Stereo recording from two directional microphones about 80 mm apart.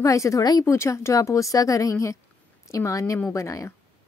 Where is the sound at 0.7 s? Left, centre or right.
Left.